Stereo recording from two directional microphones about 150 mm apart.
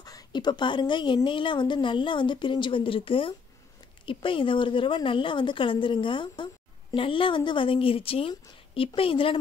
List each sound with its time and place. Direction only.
0.0 s a woman's voice: 25° left (ahead or behind)